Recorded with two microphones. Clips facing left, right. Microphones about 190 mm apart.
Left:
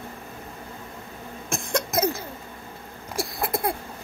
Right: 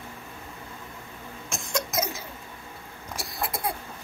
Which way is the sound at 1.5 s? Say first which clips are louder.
Left 4 dB; 55° left (ahead or behind).